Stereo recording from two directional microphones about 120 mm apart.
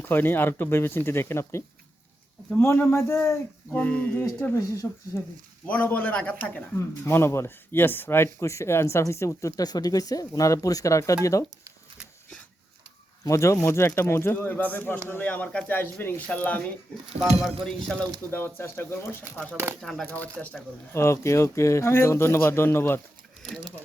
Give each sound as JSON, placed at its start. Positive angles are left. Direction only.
{"t": 0.1, "sound": "a man's voice", "side_deg": 15}
{"t": 5.6, "sound": "a man's voice", "side_deg": 10}
{"t": 13.2, "sound": "speech", "side_deg": 25}
{"t": 17.2, "sound": "speech", "side_deg": 0}
{"t": 18.3, "sound": "speech", "side_deg": 20}
{"t": 19.8, "sound": "speech", "side_deg": 5}
{"t": 20.9, "sound": "a man's voice", "side_deg": 25}
{"t": 23.4, "sound": "speech", "side_deg": 5}